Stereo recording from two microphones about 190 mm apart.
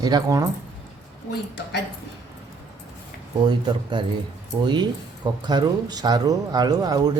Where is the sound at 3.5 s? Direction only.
25° right (ahead or behind).